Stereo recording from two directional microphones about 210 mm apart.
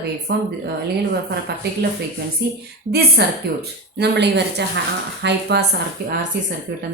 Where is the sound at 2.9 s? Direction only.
50° right (ahead or behind).